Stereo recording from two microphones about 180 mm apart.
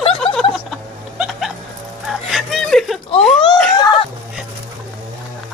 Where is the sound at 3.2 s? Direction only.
5° left (ahead or behind).